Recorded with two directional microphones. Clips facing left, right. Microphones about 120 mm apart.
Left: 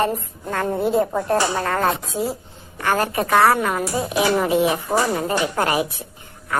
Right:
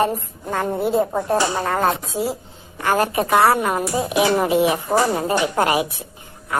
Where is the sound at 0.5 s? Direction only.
15° right (ahead or behind).